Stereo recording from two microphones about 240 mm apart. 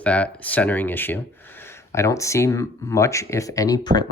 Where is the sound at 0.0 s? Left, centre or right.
Centre.